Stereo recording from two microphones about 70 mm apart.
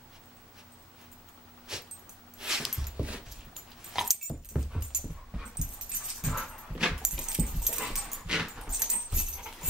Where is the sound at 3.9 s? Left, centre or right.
Centre.